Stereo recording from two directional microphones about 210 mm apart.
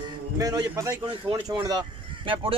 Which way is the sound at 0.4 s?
15° right (ahead or behind).